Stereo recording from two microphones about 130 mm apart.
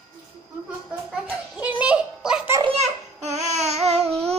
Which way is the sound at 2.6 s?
55° right (ahead or behind).